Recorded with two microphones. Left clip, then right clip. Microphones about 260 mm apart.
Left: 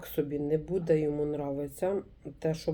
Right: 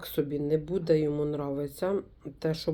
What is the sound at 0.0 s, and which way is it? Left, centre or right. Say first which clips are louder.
Speech: right 2 dB; right.